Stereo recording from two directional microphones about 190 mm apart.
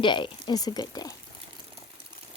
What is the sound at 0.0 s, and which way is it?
Speech, 25° left (ahead or behind).